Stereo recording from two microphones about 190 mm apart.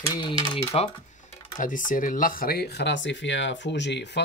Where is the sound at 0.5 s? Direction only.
30° left (ahead or behind).